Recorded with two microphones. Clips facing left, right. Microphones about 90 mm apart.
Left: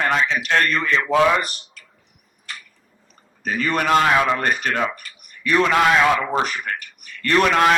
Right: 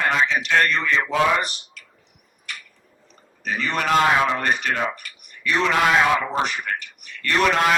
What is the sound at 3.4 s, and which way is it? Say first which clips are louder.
Speech: left 3 dB; 45° left (ahead or behind).